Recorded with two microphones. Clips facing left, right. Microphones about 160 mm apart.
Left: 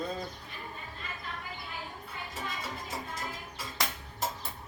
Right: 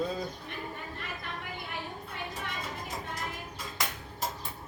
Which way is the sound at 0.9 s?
70° right (ahead or behind).